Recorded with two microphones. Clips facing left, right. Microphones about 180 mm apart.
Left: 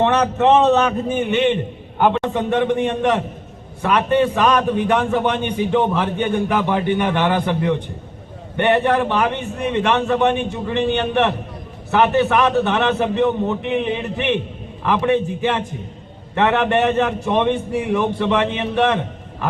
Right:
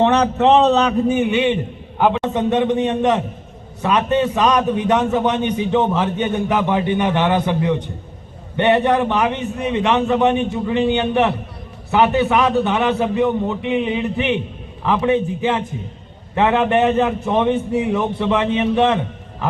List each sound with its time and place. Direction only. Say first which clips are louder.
0.0 s a man's voice: right 1 dB; 20° right (ahead or behind)